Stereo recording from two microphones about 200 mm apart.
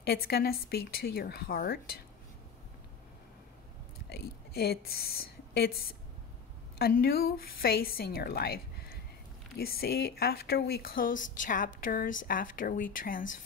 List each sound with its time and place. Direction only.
0.0 s speech: 50° left (ahead or behind)
4.1 s a woman's voice: 50° left (ahead or behind)
6.8 s speech: 50° left (ahead or behind)